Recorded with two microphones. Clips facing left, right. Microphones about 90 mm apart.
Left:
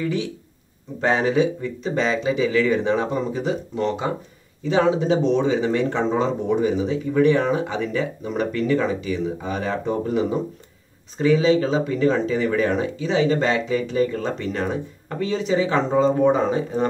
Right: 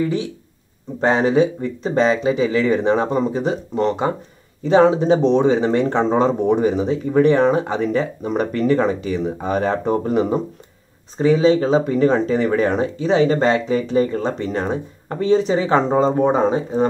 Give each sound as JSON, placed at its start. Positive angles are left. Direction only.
{"t": 1.0, "sound": "speech", "side_deg": -35}
{"t": 11.1, "sound": "speech", "side_deg": -35}